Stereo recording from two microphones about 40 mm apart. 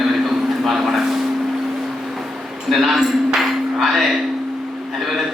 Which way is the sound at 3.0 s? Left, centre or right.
Centre.